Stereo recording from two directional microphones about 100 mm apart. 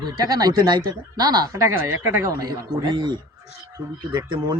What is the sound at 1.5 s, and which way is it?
Speech, 30° right (ahead or behind).